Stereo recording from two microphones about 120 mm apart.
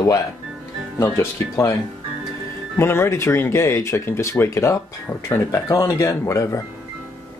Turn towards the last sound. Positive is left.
turn(degrees=25)  # may be behind; listen again after turning